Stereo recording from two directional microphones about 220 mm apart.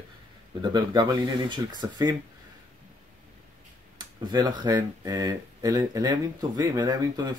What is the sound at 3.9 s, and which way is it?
Speech, 20° right (ahead or behind).